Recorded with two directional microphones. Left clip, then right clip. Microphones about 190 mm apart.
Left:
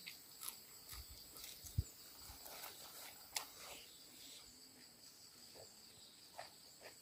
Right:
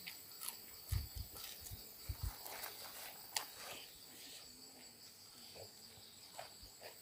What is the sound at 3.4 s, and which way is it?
Cricket, centre (ahead or behind).